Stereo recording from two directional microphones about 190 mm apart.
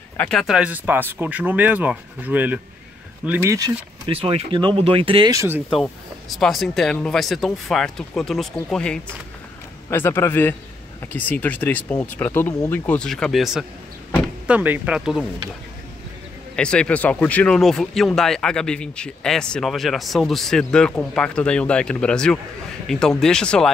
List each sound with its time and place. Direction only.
0.2 s speech: centre (ahead or behind); by 3.7 s 15° right (ahead or behind)
4.1 s speech: 30° right (ahead or behind)
5.7 s speech: centre (ahead or behind)
16.5 s speech: 5° left (ahead or behind)